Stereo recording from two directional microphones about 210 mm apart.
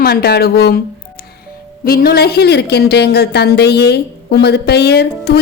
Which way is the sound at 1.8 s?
45° left (ahead or behind).